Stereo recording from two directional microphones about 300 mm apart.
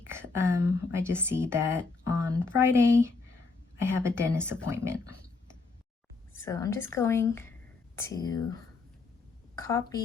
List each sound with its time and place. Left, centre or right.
0.1 s a woman's voice: centre
6.4 s a woman's voice: centre
9.6 s a woman's voice: centre